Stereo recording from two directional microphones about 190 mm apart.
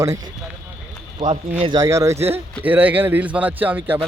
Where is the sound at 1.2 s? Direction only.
25° right (ahead or behind).